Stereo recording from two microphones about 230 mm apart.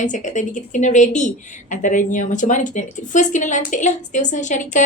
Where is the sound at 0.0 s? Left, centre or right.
Left.